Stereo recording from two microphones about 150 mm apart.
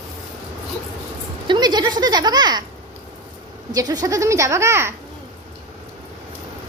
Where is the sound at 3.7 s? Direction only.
25° right (ahead or behind).